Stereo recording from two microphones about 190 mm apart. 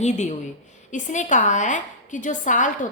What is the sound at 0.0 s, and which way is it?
A woman's voice, 40° left (ahead or behind).